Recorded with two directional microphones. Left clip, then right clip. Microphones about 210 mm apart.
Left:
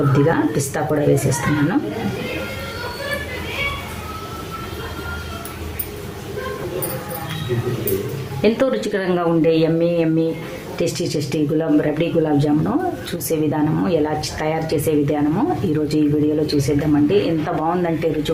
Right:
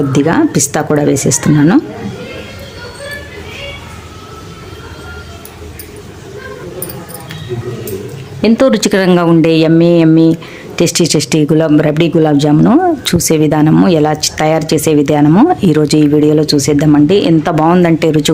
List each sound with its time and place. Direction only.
0.3 s a woman's voice: 55° right (ahead or behind)
8.4 s speech: 40° right (ahead or behind)